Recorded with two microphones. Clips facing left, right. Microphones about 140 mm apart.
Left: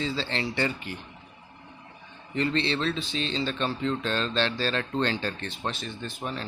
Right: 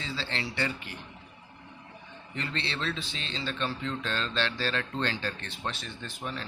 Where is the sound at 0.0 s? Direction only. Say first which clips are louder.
Left 6 dB; 30° left (ahead or behind).